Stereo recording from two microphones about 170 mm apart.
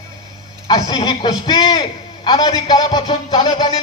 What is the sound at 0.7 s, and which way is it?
A man's voice, 25° left (ahead or behind).